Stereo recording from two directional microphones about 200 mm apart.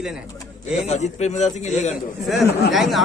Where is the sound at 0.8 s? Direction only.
35° left (ahead or behind).